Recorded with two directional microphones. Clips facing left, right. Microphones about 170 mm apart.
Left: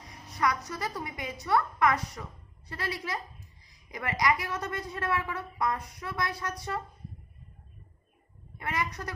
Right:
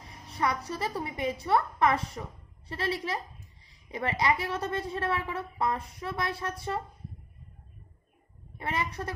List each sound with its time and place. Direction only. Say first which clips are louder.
0.0 s a woman's voice: left 1 dB; 30° right (ahead or behind)
8.5 s a woman's voice: right 1 dB; 25° right (ahead or behind)